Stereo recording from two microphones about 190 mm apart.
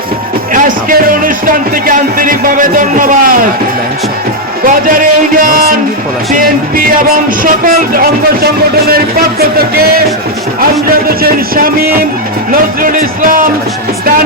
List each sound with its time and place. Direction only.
0.5 s speech: 45° right (ahead or behind)
4.6 s speech: 45° right (ahead or behind)
11.2 s speech: 50° right (ahead or behind)